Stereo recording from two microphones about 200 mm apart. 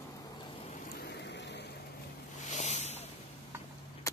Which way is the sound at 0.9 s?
55° left (ahead or behind).